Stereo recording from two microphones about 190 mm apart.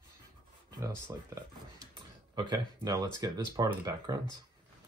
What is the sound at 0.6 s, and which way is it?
Speech, 15° right (ahead or behind).